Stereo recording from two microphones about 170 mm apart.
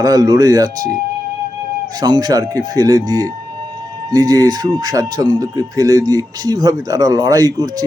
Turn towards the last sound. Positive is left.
turn(degrees=-20)  # may be behind; listen again after turning